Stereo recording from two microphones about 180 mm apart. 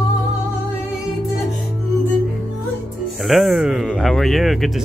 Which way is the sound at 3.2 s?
Centre (ahead or behind).